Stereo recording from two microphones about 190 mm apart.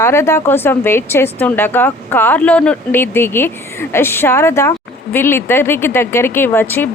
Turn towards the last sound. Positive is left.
turn(degrees=10)  # may be behind; listen again after turning